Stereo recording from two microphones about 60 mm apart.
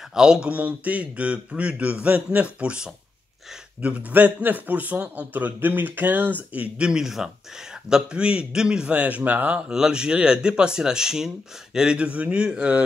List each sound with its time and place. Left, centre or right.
0.1 s a man's voice: centre
6.9 s speech: centre; by 9.6 s right
9.7 s speech: centre